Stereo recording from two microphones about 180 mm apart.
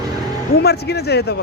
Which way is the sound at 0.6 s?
65° left (ahead or behind).